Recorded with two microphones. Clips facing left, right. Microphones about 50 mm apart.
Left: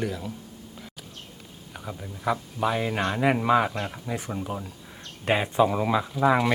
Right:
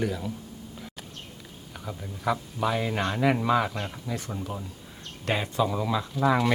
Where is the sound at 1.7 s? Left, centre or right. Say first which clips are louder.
Left 1 dB; centre.